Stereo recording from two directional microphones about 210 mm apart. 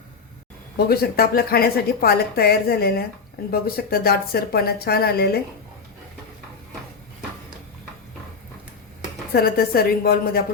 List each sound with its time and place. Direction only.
0.9 s speech: 45° left (ahead or behind)
9.3 s speech: 45° left (ahead or behind)